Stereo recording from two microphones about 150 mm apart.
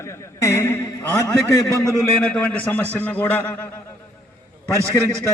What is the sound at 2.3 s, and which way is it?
A man's voice, 10° left (ahead or behind).